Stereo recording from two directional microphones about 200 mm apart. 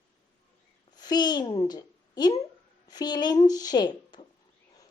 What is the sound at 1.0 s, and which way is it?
A woman's voice, 20° left (ahead or behind).